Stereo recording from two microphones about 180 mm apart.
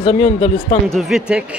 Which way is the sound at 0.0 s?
35° left (ahead or behind).